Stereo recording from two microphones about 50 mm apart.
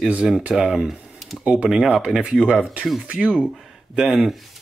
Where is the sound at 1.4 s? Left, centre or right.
Centre.